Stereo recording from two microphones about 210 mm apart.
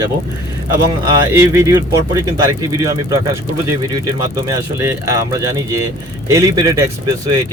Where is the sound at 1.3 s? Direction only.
15° right (ahead or behind).